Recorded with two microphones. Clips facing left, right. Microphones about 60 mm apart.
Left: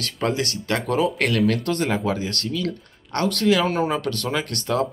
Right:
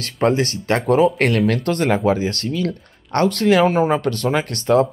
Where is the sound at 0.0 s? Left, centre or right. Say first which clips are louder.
Right 6 dB; right.